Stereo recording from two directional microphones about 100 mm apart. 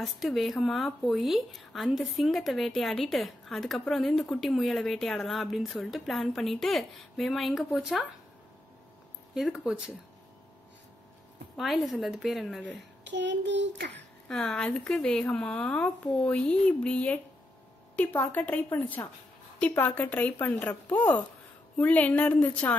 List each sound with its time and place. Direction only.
0.0 s speech: centre (ahead or behind)
9.3 s speech: 5° right (ahead or behind)
11.5 s speech: centre (ahead or behind)
13.9 s speech: 10° left (ahead or behind)